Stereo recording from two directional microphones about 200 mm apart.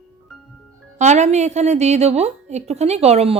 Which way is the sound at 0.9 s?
35° right (ahead or behind).